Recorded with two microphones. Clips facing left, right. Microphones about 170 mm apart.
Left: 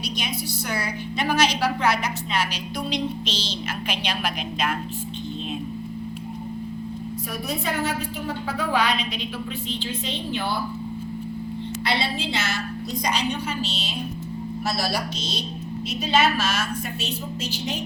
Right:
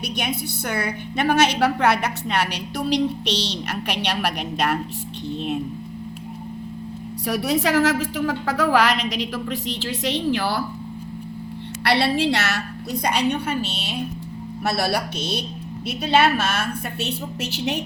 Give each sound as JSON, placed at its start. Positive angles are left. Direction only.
{"t": 0.2, "sound": "a woman's voice", "side_deg": -55}
{"t": 7.3, "sound": "a woman's voice", "side_deg": -90}
{"t": 11.9, "sound": "a woman's voice", "side_deg": -70}
{"t": 13.1, "sound": "a woman's voice", "side_deg": -60}